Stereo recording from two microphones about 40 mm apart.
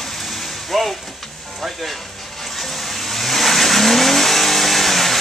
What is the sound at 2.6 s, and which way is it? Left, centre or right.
Vehicle, centre.